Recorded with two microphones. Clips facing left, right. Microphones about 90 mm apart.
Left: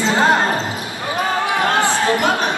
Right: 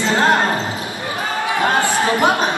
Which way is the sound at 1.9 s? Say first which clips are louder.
Right 1 dB; 20° right (ahead or behind).